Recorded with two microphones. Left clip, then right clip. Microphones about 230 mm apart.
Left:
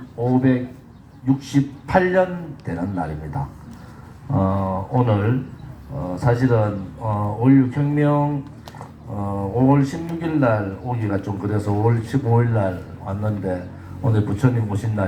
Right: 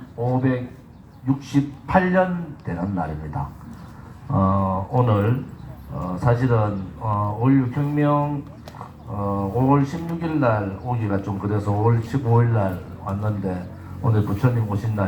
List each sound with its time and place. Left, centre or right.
0.3 s speech: left